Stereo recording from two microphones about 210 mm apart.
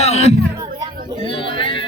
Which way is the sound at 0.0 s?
30° left (ahead or behind).